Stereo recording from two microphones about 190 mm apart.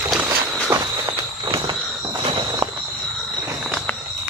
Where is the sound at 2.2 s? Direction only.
25° right (ahead or behind).